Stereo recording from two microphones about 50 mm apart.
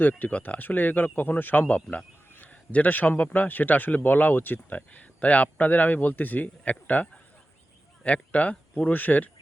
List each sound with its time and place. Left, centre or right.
0.0 s speech: left